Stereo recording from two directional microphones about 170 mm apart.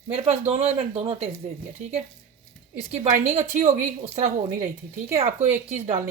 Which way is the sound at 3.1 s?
45° right (ahead or behind).